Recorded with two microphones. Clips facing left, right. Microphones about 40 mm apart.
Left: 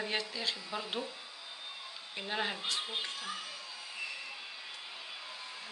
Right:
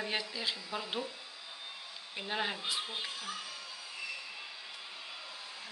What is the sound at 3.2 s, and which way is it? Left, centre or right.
Speech, left.